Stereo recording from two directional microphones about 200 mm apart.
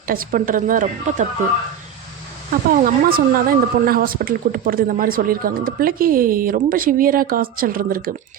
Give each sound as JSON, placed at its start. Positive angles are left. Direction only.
{"t": 0.1, "sound": "speech", "side_deg": -45}
{"t": 2.6, "sound": "speech", "side_deg": -45}